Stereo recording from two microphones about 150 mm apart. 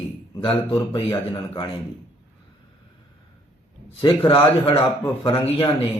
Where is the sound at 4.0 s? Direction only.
30° left (ahead or behind).